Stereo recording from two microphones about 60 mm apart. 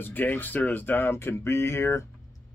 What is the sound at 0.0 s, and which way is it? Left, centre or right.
Speech, left.